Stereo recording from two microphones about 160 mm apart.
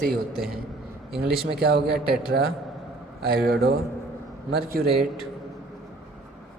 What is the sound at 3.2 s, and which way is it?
Speech, 70° right (ahead or behind).